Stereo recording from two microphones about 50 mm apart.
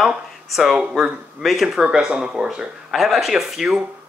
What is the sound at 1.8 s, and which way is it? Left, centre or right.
Speech, right.